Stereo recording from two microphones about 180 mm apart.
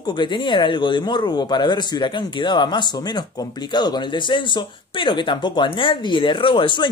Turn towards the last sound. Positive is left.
turn(degrees=25)  # may be behind; listen again after turning